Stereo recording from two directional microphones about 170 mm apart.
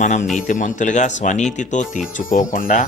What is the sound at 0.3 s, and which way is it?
Speech, 45° left (ahead or behind).